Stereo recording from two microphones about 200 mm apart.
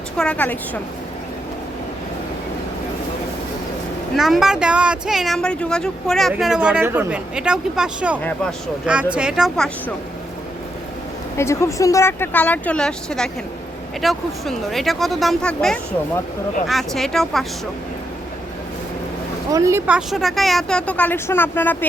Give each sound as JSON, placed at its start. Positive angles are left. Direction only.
{"t": 0.2, "sound": "speech", "side_deg": 5}
{"t": 4.2, "sound": "speech", "side_deg": 0}
{"t": 11.3, "sound": "speech", "side_deg": 15}
{"t": 19.5, "sound": "speech", "side_deg": -15}
{"t": 20.0, "sound": "speech", "side_deg": 0}